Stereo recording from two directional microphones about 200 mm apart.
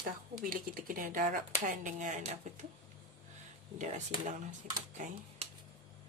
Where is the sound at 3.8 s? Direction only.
35° right (ahead or behind).